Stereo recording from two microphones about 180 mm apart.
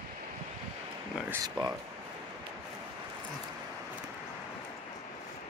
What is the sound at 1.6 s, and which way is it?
Speech, 25° right (ahead or behind).